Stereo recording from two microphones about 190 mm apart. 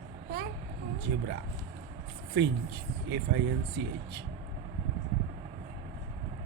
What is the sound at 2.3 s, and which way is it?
Speech, 60° right (ahead or behind).